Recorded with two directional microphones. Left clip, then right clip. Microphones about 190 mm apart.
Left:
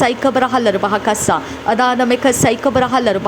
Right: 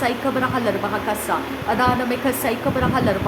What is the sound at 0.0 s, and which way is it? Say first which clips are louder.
A woman's voice: left 7 dB; 40° left (ahead or behind).